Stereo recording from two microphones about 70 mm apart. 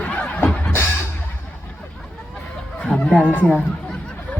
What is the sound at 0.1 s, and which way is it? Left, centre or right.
Snicker, left.